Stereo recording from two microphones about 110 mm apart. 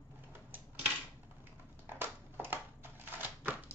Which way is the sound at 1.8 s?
20° right (ahead or behind).